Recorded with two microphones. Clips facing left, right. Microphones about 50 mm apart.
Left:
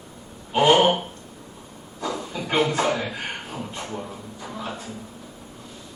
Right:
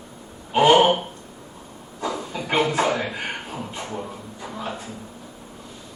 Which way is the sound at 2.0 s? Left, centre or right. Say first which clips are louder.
Right 1 dB; centre.